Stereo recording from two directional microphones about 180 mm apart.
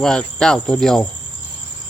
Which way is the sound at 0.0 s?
5° left (ahead or behind).